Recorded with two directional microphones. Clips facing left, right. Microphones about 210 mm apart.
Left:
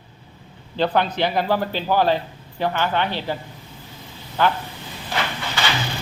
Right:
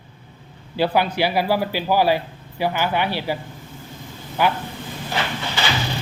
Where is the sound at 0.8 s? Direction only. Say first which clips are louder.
Right 1 dB; 10° right (ahead or behind).